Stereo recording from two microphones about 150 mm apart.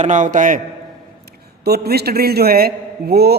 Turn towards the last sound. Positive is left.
turn(degrees=-90)